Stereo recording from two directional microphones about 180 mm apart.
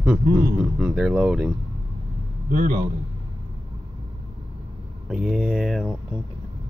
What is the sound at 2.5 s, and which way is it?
Speech, 50° right (ahead or behind).